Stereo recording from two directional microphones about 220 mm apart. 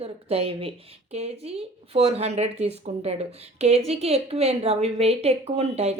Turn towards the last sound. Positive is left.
turn(degrees=-30)  # may be behind; listen again after turning